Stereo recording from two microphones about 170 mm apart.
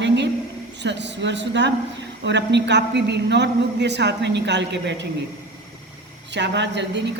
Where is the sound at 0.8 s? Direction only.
90° right.